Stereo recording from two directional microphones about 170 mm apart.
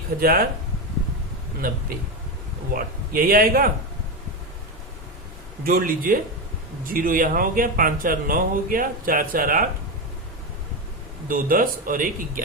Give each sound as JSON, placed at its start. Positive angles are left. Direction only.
{"t": 0.2, "sound": "speech", "side_deg": -60}
{"t": 1.6, "sound": "speech", "side_deg": -60}
{"t": 5.6, "sound": "speech", "side_deg": -55}
{"t": 11.3, "sound": "speech", "side_deg": -55}